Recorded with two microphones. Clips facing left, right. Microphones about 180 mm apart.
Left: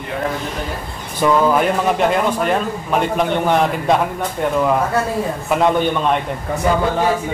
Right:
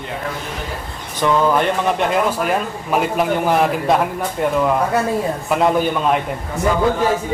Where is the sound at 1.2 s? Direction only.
5° left (ahead or behind).